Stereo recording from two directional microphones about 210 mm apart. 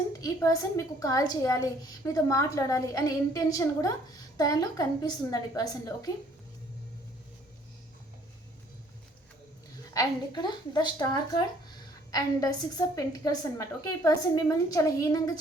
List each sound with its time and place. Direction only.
0.1 s a woman's voice: 15° left (ahead or behind)
9.9 s a woman's voice: 20° left (ahead or behind)